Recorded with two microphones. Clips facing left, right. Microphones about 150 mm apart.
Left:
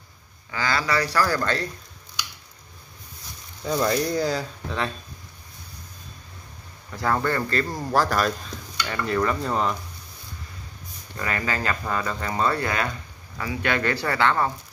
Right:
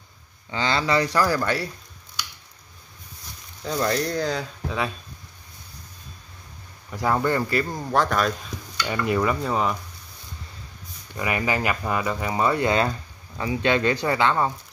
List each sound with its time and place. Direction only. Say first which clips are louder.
0.5 s speech: right 2 dB; 25° right (ahead or behind)
3.6 s speech: left 1 dB; 5° left (ahead or behind)
6.9 s speech: right 2 dB; 15° right (ahead or behind)
7.7 s speech: left 2 dB; 5° left (ahead or behind)
8.8 s speech: right 1 dB; 15° right (ahead or behind)
11.1 s speech: right 3 dB; 15° right (ahead or behind)